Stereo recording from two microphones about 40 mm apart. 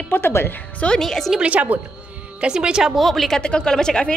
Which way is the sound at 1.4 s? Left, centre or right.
Right.